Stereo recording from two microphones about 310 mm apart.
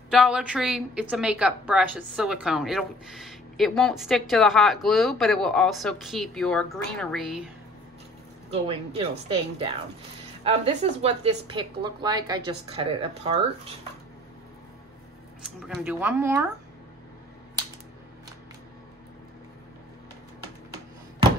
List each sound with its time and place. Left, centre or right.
0.1 s a woman's voice: centre
8.5 s a woman's voice: centre
10.4 s a woman's voice: centre
15.4 s a woman's voice: centre